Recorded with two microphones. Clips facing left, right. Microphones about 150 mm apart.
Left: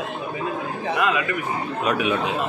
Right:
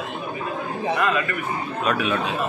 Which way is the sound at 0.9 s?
15° left (ahead or behind).